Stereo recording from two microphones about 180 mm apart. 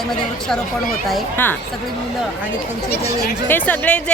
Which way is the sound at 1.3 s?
10° left (ahead or behind).